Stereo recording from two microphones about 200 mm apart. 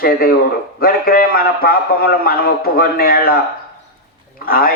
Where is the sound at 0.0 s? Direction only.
50° left (ahead or behind).